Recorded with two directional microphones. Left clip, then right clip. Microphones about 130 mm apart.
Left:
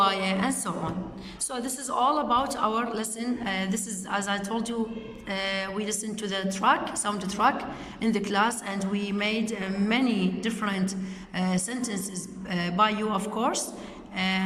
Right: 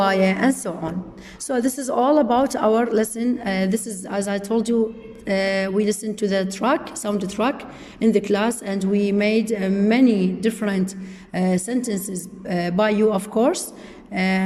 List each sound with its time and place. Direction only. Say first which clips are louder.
0.0 s a woman's voice: right 6 dB; 50° right (ahead or behind)
3.2 s a woman's voice: right 7 dB; 40° right (ahead or behind)